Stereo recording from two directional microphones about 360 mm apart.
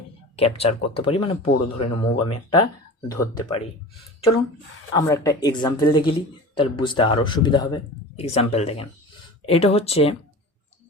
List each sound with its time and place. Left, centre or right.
0.3 s speech: centre
4.9 s speech: centre